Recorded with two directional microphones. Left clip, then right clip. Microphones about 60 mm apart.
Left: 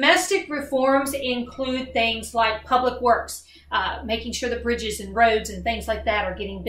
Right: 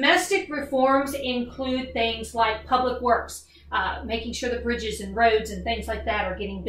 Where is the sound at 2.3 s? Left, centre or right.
Left.